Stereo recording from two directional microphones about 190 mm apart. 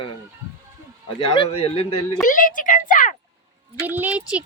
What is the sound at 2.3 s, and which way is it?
Speech, 45° left (ahead or behind).